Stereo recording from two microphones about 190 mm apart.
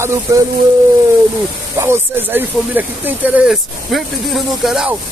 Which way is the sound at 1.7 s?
10° right (ahead or behind).